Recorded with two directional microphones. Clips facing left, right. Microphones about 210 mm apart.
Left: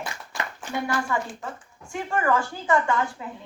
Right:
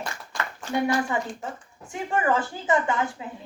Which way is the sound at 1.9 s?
20° right (ahead or behind).